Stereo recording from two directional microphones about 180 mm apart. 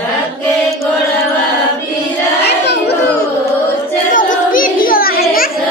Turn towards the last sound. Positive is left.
turn(degrees=55)  # may be behind; listen again after turning